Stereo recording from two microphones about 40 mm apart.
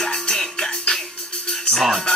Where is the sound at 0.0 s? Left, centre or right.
Centre.